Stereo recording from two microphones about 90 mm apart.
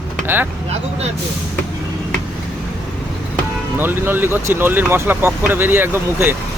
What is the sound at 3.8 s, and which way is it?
Speech, 25° right (ahead or behind).